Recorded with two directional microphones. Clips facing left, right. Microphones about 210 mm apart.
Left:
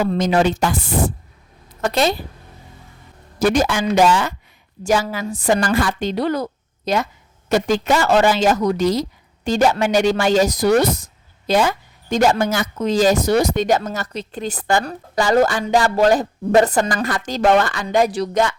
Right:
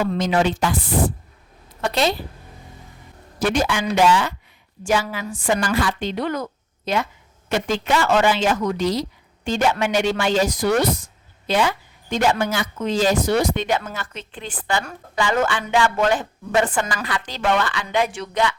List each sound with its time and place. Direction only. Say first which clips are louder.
0.0 s speech: left 3 dB; 40° left (ahead or behind)
3.3 s speech: left 4 dB; 40° left (ahead or behind)